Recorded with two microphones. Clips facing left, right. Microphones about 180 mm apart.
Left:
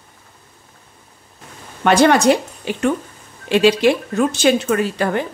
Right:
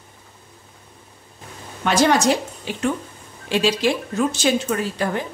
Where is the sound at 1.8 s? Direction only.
60° left (ahead or behind).